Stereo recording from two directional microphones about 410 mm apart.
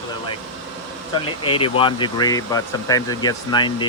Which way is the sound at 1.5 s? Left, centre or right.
Centre.